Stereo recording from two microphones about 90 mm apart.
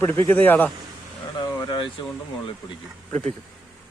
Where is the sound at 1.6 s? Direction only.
60° left (ahead or behind).